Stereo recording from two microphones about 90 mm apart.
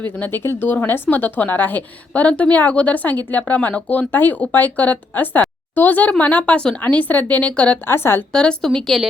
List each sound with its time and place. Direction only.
0.0 s speech: 20° left (ahead or behind)
7.9 s a woman's voice: 25° left (ahead or behind)
8.3 s speech: 10° left (ahead or behind)